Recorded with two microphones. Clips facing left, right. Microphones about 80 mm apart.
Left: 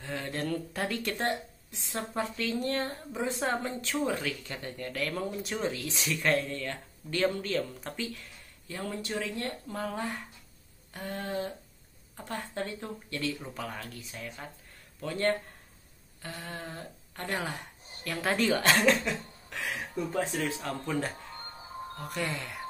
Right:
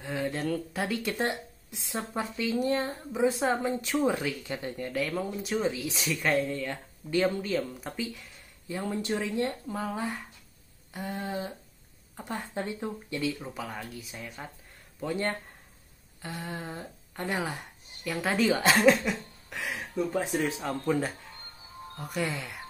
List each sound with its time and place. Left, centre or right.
0.0 s speech: centre
9.8 s speech: centre
20.2 s speech: centre
21.9 s speech: centre